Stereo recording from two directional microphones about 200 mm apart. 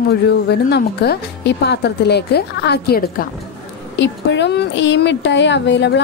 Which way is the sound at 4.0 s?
65° left (ahead or behind).